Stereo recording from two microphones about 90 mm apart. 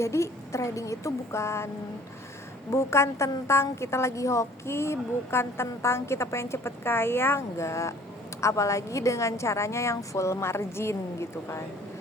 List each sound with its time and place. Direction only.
0.0 s a woman's voice: 35° left (ahead or behind)
2.7 s a woman's voice: 30° left (ahead or behind)